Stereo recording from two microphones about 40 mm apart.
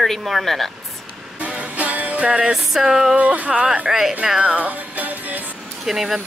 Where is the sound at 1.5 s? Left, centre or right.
Right.